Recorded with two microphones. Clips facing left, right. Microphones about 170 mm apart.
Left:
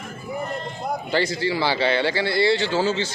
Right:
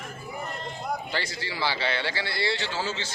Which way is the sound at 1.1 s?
20° left (ahead or behind).